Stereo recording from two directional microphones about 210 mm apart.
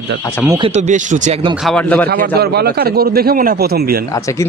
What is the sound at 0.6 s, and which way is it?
Speech, 35° right (ahead or behind).